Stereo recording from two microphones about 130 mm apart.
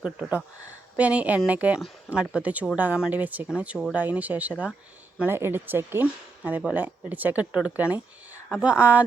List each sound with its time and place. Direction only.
0.2 s speech: 10° right (ahead or behind)